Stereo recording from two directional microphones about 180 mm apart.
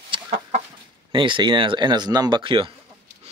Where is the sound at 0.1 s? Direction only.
30° right (ahead or behind).